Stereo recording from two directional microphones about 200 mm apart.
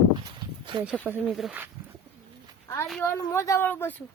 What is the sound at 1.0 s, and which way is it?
Speech, 5° right (ahead or behind).